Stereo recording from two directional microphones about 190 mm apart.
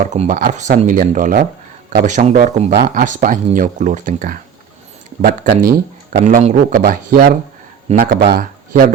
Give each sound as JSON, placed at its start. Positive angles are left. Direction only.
{"t": 0.1, "sound": "speech", "side_deg": -40}